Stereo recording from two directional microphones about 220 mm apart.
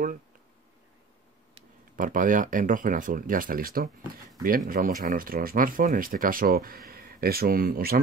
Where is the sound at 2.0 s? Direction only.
35° right (ahead or behind).